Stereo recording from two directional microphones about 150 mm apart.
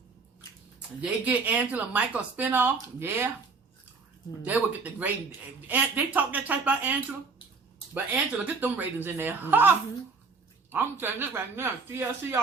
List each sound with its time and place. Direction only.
1.2 s speech: 10° right (ahead or behind)
4.4 s speech: 10° right (ahead or behind)
7.9 s speech: 10° right (ahead or behind)